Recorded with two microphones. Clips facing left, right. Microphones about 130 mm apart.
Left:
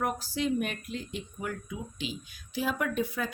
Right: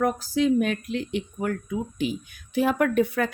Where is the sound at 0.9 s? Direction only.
75° right (ahead or behind).